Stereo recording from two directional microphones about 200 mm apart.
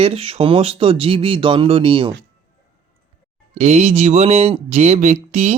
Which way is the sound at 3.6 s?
35° right (ahead or behind).